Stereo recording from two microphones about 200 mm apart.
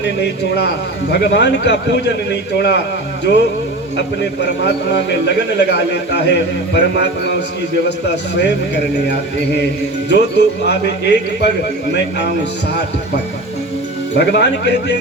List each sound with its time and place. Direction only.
1.1 s speech: 60° left (ahead or behind)
3.9 s speech: 60° left (ahead or behind)
14.2 s speech: 55° left (ahead or behind)